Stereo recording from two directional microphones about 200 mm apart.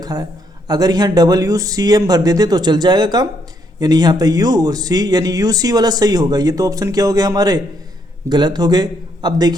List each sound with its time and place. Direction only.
0.0 s a man's voice: 20° right (ahead or behind)